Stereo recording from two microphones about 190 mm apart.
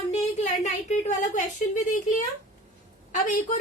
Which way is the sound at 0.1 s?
35° left (ahead or behind).